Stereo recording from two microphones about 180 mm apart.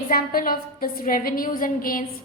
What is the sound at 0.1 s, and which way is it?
A woman's voice, 55° left (ahead or behind).